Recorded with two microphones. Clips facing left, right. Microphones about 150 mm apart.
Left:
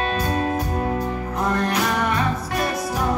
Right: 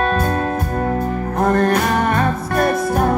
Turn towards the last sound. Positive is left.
turn(degrees=-55)  # may be behind; listen again after turning